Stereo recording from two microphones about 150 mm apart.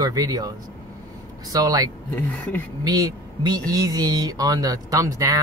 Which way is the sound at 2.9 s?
25° right (ahead or behind).